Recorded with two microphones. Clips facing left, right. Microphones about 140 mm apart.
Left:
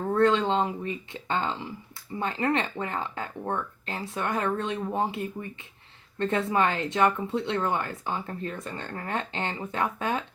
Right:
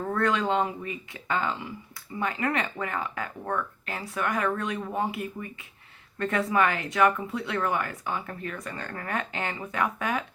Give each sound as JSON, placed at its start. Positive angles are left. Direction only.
{"t": 0.1, "sound": "speech", "side_deg": 25}